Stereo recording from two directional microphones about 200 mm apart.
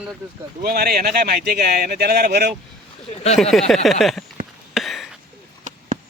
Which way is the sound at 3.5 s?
Centre (ahead or behind).